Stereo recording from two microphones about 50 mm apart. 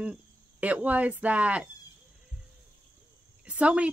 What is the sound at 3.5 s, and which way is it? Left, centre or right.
Speech, right.